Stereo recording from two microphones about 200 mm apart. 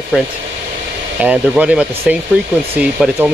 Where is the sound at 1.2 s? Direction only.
5° right (ahead or behind).